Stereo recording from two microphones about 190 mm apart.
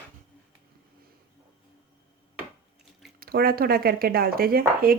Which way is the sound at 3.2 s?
50° right (ahead or behind).